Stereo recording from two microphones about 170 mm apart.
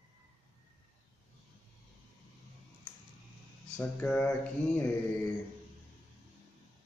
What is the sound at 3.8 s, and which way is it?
Speech, 5° left (ahead or behind).